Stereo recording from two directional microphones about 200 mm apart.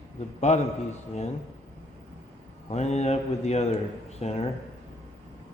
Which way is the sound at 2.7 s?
35° left (ahead or behind).